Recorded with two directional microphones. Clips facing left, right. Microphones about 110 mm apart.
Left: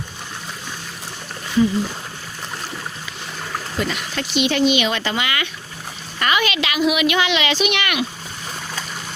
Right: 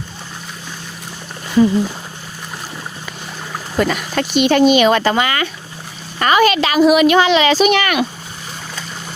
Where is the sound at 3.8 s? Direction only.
50° right (ahead or behind).